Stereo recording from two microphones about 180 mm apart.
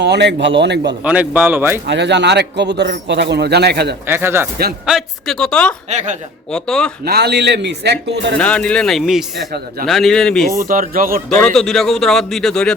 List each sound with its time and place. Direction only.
0.0 s a man's voice: 75° right (ahead or behind)
1.0 s speech: 10° right (ahead or behind)
1.9 s a man's voice: 75° right (ahead or behind)
4.0 s speech: 10° right (ahead or behind)
4.9 s a man's voice: centre (ahead or behind)
5.9 s speech: 40° right (ahead or behind)
6.5 s a man's voice: 5° left (ahead or behind)
7.0 s a man's voice: 65° right (ahead or behind)
8.4 s a man's voice: 5° left (ahead or behind)
10.7 s speech: 50° right (ahead or behind)
11.3 s a man's voice: 5° left (ahead or behind)